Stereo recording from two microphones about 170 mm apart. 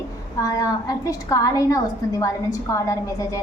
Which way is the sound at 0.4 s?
20° left (ahead or behind).